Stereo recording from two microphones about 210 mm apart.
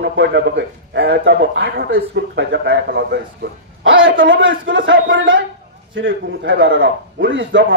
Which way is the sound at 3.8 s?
65° right (ahead or behind).